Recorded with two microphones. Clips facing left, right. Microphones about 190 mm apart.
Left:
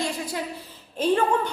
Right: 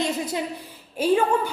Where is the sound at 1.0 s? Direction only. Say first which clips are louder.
Right 1 dB; 10° right (ahead or behind).